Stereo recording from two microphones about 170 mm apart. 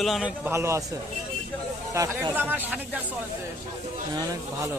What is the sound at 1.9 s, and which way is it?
Speech, 20° right (ahead or behind).